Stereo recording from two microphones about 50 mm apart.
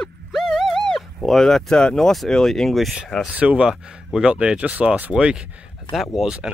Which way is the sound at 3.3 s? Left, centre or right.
Right.